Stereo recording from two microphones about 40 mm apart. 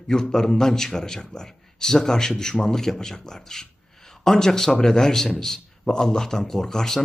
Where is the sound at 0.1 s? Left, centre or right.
Centre.